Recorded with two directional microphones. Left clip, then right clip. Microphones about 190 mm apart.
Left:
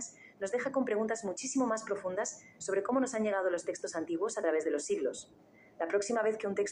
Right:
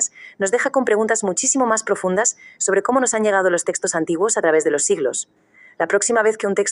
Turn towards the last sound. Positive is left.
turn(degrees=-50)  # may be behind; listen again after turning